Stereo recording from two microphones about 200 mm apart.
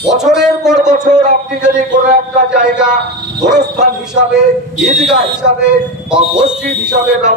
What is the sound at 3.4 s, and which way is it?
A man's voice, 40° right (ahead or behind).